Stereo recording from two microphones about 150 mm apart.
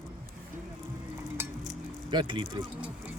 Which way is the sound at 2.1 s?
30° right (ahead or behind).